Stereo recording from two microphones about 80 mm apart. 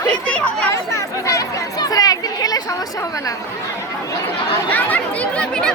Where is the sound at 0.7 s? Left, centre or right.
Left.